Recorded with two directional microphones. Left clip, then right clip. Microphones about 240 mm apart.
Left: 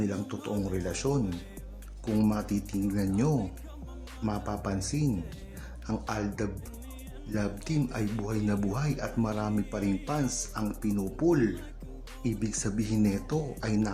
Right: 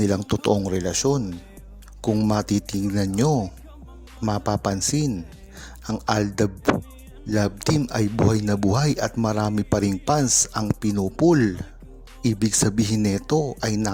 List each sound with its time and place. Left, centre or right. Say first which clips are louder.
0.0 s speech: right 12 dB; right